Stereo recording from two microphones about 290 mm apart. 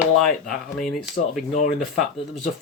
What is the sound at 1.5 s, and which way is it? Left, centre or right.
Speech, left.